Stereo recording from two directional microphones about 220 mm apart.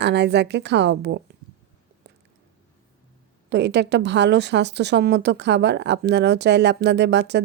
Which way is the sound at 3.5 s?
50° right (ahead or behind).